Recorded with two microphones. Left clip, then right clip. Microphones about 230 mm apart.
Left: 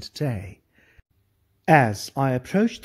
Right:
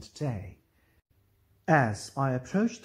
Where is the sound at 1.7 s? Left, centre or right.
Left.